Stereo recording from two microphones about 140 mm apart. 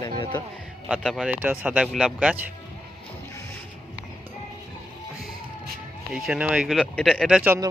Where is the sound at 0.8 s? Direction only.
5° right (ahead or behind).